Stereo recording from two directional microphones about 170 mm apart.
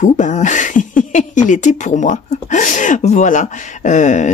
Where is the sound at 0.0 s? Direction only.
45° left (ahead or behind).